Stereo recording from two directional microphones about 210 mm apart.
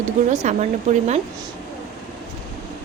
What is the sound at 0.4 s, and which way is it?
Speech, 35° right (ahead or behind).